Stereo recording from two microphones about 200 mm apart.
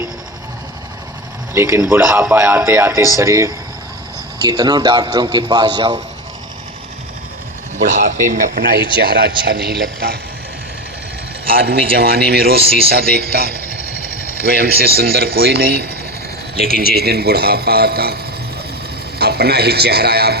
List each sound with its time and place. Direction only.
1.5 s a man's voice: 15° right (ahead or behind)
7.8 s a man's voice: 40° right (ahead or behind)
11.6 s a man's voice: 50° right (ahead or behind)
14.6 s a man's voice: 50° right (ahead or behind)
19.2 s a man's voice: 55° right (ahead or behind)